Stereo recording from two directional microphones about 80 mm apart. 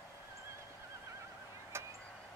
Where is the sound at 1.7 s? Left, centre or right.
Right.